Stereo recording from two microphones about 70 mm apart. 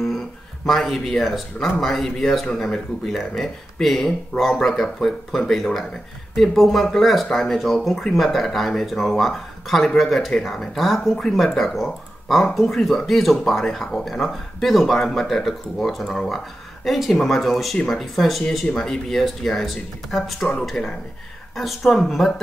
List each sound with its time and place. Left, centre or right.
0.7 s speech: centre